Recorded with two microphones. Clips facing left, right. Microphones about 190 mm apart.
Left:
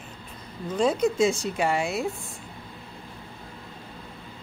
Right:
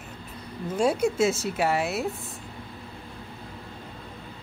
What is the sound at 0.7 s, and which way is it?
A woman's voice, 10° right (ahead or behind).